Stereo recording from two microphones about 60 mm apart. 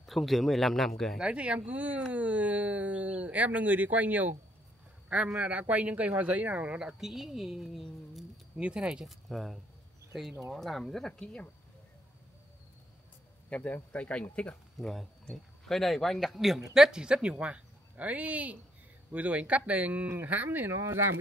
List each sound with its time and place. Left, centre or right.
0.0 s speech: centre
1.2 s speech: centre
5.4 s speech: right
6.8 s speech: centre
8.5 s speech: centre
9.0 s speech: centre
13.5 s speech: centre
14.8 s speech: centre; by 21.1 s right